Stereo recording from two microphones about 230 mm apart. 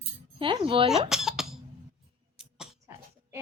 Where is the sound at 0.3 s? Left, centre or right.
Right.